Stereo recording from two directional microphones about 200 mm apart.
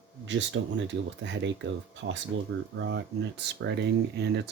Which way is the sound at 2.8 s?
60° right (ahead or behind).